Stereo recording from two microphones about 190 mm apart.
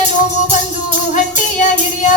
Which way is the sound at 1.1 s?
40° left (ahead or behind).